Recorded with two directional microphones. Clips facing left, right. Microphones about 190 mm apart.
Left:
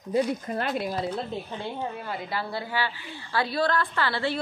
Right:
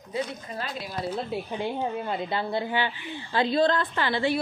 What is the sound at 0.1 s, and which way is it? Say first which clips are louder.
Speech: left 6 dB; 55° left (ahead or behind).